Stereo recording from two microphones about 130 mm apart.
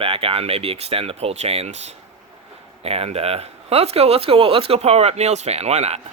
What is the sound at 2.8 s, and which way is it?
Speech, 50° right (ahead or behind).